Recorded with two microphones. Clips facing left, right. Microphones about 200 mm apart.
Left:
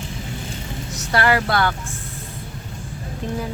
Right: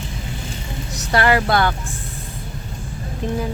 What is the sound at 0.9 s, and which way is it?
Speech, 20° right (ahead or behind).